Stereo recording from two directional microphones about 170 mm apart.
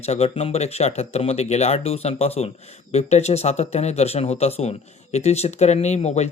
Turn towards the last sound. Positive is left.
turn(degrees=40)  # may be behind; listen again after turning